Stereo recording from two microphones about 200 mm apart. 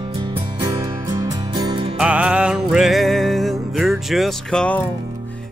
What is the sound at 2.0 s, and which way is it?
Music, 5° right (ahead or behind).